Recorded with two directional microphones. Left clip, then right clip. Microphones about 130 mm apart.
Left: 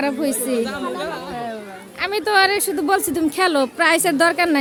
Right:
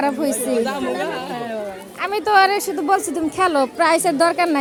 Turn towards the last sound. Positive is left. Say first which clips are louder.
# even
turn(degrees=25)  # may be behind; listen again after turning